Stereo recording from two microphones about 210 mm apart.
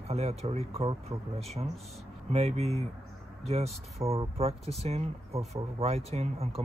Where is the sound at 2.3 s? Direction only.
30° right (ahead or behind).